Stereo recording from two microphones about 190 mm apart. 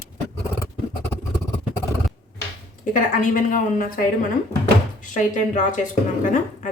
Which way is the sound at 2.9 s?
45° left (ahead or behind).